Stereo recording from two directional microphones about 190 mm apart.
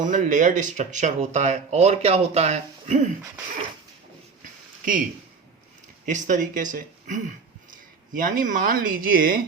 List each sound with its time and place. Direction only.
0.0 s speech: 40° right (ahead or behind)
6.1 s speech: 40° right (ahead or behind)